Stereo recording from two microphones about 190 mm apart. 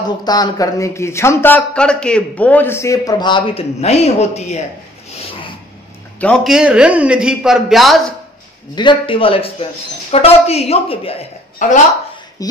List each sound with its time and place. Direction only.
0.2 s a man's voice: 20° left (ahead or behind)
6.1 s speech: 5° left (ahead or behind)
8.7 s a man's voice: 25° left (ahead or behind)
11.6 s speech: 45° left (ahead or behind)
12.4 s a man's voice: 20° left (ahead or behind)